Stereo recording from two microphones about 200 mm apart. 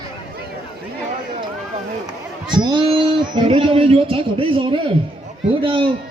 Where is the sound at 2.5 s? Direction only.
25° right (ahead or behind).